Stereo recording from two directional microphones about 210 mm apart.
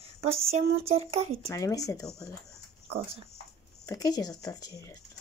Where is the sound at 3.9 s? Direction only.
15° left (ahead or behind).